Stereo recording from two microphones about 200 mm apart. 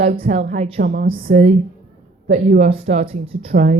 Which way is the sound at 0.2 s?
30° right (ahead or behind).